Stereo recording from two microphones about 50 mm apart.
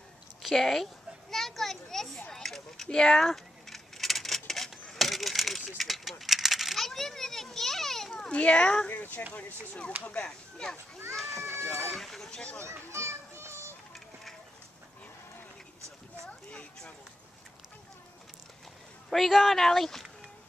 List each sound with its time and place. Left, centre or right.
0.4 s speech: centre
1.3 s children playing: centre
2.3 s a sound: centre
3.3 s a sound: centre
5.8 s coin: centre
8.3 s speech: left
8.8 s speech: left
9.3 s speech: left
11.1 s a sound: centre
11.7 s speech: centre
12.3 s speech: centre
12.6 s children playing: right
16.3 s a sound: left
19.0 s speech: centre